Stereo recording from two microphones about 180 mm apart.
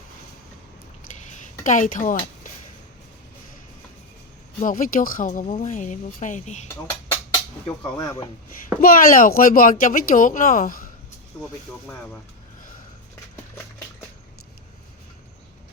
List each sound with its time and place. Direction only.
1.3 s a sound: 45° left (ahead or behind)
4.6 s speech: 45° left (ahead or behind)
7.9 s speech: 20° left (ahead or behind)
8.8 s speech: 50° left (ahead or behind)